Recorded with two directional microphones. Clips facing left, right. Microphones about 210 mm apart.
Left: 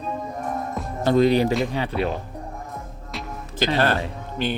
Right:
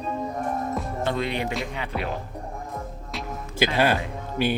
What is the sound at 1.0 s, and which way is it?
Speech, 40° left (ahead or behind).